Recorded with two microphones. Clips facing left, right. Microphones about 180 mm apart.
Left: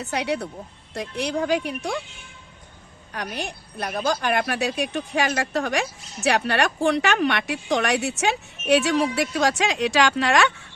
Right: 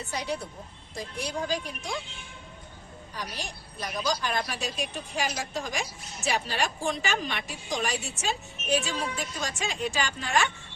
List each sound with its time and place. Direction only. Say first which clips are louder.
0.0 s a woman's voice: left 7 dB; 70° left (ahead or behind)
3.1 s a woman's voice: left 7 dB; 60° left (ahead or behind); by 10.5 s 80° left